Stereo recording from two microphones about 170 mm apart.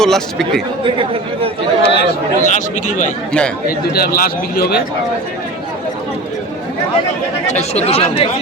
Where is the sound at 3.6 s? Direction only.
60° left (ahead or behind).